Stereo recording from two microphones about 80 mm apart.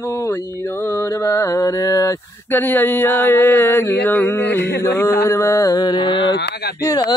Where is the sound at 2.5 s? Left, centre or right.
Left.